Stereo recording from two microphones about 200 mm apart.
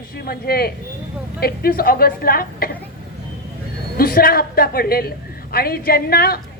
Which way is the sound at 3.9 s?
50° left (ahead or behind).